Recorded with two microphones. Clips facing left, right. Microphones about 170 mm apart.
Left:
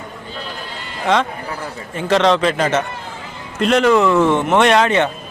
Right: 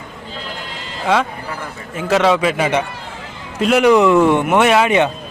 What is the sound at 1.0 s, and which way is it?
Speech, 10° right (ahead or behind).